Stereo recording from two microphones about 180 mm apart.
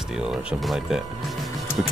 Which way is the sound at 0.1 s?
5° right (ahead or behind).